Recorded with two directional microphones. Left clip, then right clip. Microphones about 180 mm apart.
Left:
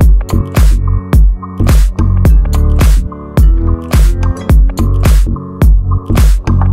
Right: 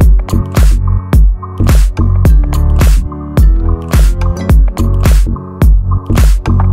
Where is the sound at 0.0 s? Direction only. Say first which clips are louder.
Even; centre (ahead or behind).